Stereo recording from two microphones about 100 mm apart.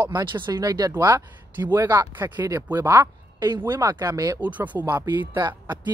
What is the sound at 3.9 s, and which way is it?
Speech, 40° right (ahead or behind).